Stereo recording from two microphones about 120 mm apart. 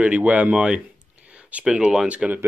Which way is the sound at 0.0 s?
10° right (ahead or behind).